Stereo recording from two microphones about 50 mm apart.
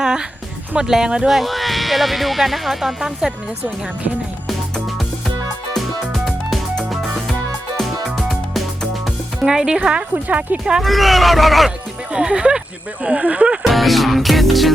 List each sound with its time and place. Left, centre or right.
0.0 s music: centre
0.8 s speech: centre
1.3 s speech: centre
6.1 s music: centre
7.8 s music: centre
10.2 s speech: right
10.6 s speech: centre
10.8 s speech: centre
12.1 s speech: centre
13.7 s music: centre